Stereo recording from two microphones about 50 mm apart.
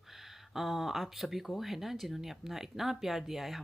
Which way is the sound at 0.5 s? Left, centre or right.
Centre.